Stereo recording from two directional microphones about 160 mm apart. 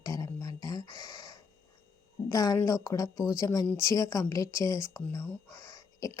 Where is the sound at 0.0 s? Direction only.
20° left (ahead or behind).